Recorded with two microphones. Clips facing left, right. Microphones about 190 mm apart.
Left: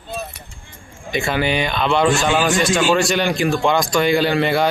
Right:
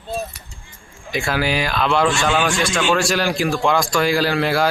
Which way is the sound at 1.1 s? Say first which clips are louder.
Left 1 dB; centre (ahead or behind).